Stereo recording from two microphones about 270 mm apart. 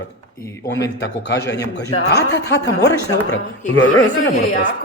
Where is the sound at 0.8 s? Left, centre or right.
Left.